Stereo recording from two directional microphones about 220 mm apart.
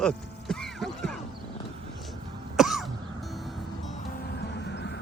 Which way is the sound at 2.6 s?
Centre (ahead or behind).